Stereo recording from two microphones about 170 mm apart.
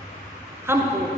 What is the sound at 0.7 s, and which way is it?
Speech, 15° right (ahead or behind).